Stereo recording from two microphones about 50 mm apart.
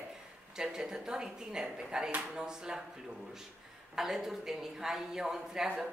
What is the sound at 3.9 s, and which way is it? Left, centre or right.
Speech, centre.